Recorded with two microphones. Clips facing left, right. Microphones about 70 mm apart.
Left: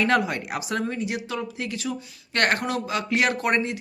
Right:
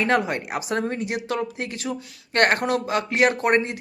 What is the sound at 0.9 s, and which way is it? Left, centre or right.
Speech, right.